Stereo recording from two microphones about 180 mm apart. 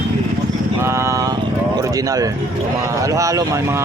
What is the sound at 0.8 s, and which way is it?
Vehicle, 15° right (ahead or behind).